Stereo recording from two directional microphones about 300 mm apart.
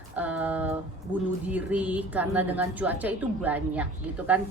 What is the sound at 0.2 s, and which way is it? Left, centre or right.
A woman's voice, centre.